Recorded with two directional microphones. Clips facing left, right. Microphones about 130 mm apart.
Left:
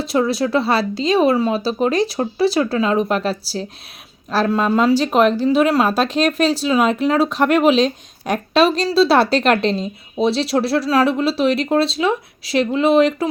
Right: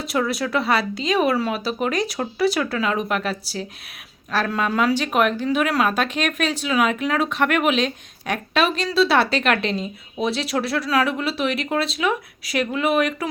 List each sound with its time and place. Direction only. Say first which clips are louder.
0.0 s speech: left 5 dB; 30° left (ahead or behind)